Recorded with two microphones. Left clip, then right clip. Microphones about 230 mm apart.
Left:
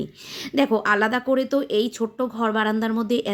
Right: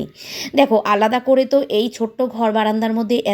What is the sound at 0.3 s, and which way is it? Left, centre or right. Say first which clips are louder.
A woman's voice: right 7 dB; centre.